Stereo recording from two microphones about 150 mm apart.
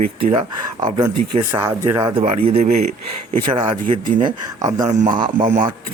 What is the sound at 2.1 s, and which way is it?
Speech, 40° right (ahead or behind).